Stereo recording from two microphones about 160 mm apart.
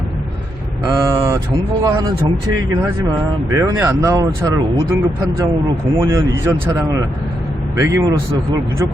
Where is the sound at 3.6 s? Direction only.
20° right (ahead or behind).